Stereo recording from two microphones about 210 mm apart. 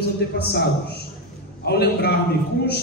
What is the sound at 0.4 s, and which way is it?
A man's voice, 50° left (ahead or behind).